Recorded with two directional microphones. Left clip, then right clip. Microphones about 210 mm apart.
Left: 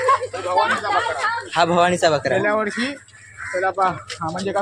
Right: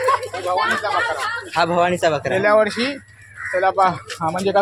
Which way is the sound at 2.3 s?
50° right (ahead or behind).